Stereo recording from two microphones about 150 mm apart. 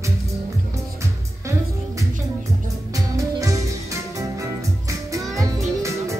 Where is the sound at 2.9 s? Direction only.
20° right (ahead or behind).